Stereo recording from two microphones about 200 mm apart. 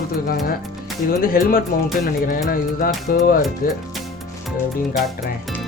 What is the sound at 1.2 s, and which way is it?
Music, 45° left (ahead or behind).